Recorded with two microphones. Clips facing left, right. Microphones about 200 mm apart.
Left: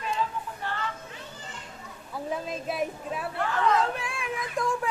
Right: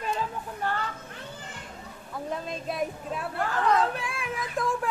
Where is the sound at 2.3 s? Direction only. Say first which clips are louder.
Left 1 dB; 5° left (ahead or behind).